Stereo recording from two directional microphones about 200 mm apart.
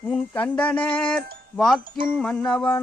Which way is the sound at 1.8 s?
45° right (ahead or behind).